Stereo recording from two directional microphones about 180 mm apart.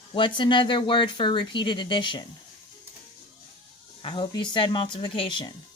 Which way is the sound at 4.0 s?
25° left (ahead or behind).